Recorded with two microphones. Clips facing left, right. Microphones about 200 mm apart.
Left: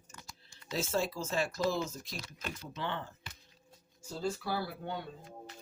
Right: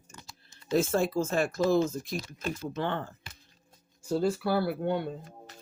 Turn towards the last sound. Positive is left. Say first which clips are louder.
# right 11 dB
turn(degrees=-65)  # may be behind; listen again after turning